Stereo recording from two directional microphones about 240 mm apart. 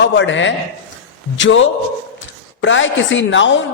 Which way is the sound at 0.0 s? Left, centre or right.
Left.